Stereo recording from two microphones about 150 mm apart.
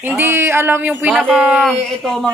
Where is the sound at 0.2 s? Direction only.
15° right (ahead or behind).